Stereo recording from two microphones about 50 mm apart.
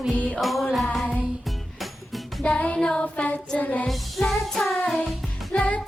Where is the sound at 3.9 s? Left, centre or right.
Centre.